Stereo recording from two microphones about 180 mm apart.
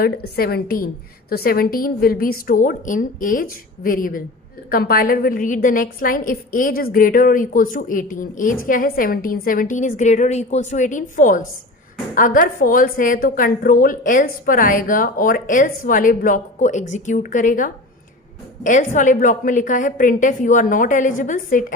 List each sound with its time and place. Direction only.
0.0 s a woman's voice: 55° left (ahead or behind)